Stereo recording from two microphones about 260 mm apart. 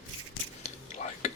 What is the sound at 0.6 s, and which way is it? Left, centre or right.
Whispering, left.